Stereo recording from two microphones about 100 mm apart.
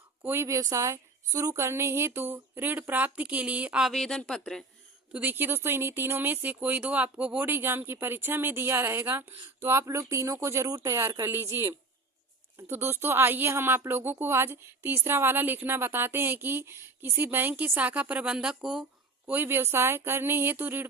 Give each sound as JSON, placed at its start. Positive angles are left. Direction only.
{"t": 0.2, "sound": "speech", "side_deg": -25}
{"t": 5.1, "sound": "a woman's voice", "side_deg": -20}
{"t": 19.3, "sound": "speech", "side_deg": -20}